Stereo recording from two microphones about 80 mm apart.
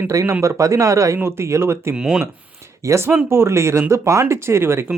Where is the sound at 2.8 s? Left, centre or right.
Right.